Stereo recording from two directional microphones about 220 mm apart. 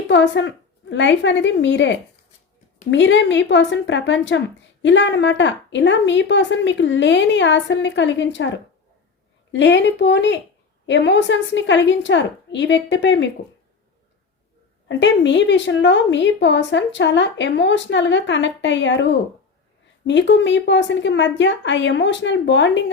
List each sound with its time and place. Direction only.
0.1 s a woman's voice: 55° left (ahead or behind)
9.5 s a woman's voice: 55° left (ahead or behind)
14.8 s a woman's voice: 55° left (ahead or behind)